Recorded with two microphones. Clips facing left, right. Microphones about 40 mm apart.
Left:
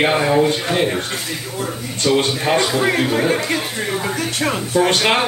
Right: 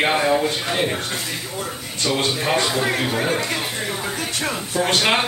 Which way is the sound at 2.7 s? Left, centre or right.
Centre.